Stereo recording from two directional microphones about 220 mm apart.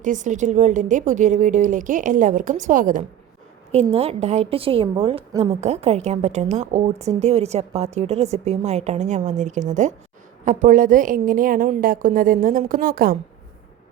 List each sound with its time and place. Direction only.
0.0 s a woman's voice: 35° right (ahead or behind)